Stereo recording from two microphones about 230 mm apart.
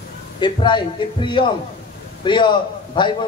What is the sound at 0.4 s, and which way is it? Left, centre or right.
A man's voice, centre.